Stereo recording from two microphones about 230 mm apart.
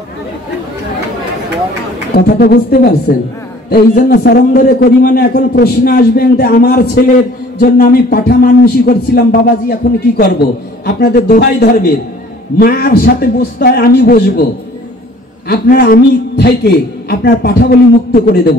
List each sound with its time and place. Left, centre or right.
2.1 s a man's voice: left
15.4 s a man's voice: left